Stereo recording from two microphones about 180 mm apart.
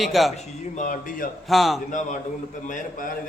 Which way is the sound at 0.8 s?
50° left (ahead or behind).